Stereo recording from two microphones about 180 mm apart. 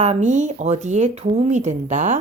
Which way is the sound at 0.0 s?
40° right (ahead or behind).